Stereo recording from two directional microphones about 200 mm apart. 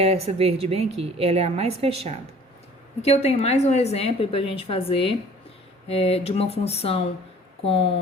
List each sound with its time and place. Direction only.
0.0 s a woman's voice: 30° right (ahead or behind)
3.0 s a woman's voice: 30° left (ahead or behind)